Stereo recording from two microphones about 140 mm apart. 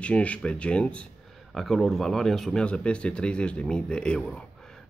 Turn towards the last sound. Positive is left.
turn(degrees=5)  # may be behind; listen again after turning